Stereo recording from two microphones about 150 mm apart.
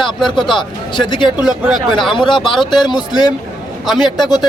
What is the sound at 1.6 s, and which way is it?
Speech, centre (ahead or behind).